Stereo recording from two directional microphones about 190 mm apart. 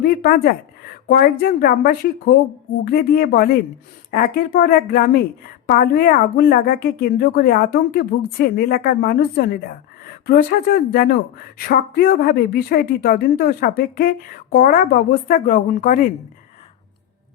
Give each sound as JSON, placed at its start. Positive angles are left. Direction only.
{"t": 0.0, "sound": "a woman's voice", "side_deg": 50}